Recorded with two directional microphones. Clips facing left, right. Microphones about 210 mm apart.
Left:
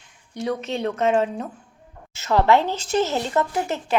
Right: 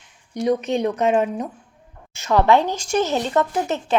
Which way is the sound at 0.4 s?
15° right (ahead or behind).